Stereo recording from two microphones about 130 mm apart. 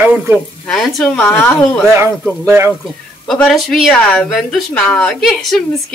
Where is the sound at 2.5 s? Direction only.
15° right (ahead or behind).